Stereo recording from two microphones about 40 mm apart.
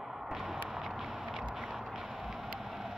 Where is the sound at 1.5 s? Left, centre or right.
Centre.